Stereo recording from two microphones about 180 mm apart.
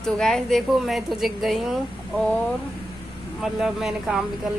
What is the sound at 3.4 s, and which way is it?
Speech, 5° right (ahead or behind).